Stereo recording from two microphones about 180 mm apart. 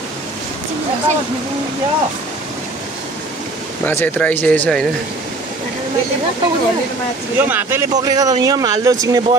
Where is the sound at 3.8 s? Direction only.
10° left (ahead or behind).